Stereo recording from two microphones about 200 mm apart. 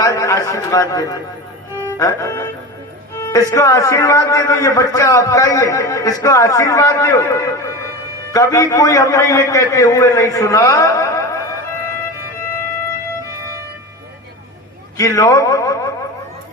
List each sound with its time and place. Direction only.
0.0 s a sound: 15° left (ahead or behind)
2.0 s a man's voice: 15° left (ahead or behind)
14.9 s a man's voice: 15° left (ahead or behind)